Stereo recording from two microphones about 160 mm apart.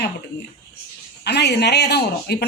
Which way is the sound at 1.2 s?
90° left.